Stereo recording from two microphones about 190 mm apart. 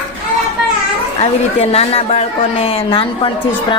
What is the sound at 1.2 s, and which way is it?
A woman's voice, 30° left (ahead or behind).